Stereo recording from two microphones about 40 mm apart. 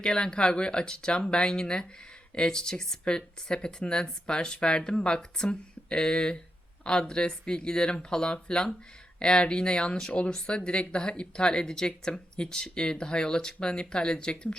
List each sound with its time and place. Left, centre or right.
0.0 s speech: centre